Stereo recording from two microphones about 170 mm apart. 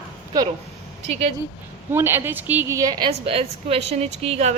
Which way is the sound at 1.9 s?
15° right (ahead or behind).